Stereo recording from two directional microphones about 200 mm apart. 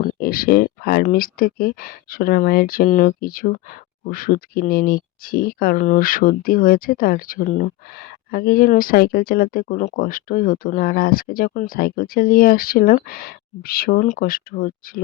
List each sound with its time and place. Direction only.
0.0 s speech: 45° left (ahead or behind)